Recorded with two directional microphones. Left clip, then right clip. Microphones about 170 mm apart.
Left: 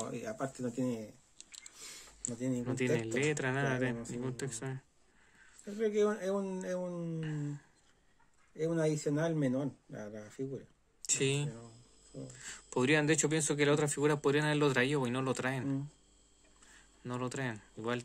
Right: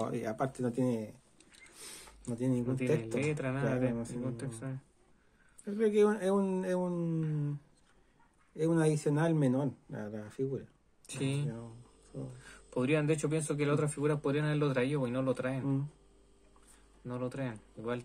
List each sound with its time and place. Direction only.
0.0 s speech: 40° right (ahead or behind)
1.7 s a sound: 40° right (ahead or behind)
2.3 s speech: 40° right (ahead or behind)
2.6 s speech: 65° left (ahead or behind)
5.8 s speech: 45° right (ahead or behind)
8.5 s speech: 45° right (ahead or behind)
11.1 s speech: 65° left (ahead or behind)
12.4 s speech: 65° left (ahead or behind)
17.0 s speech: 65° left (ahead or behind)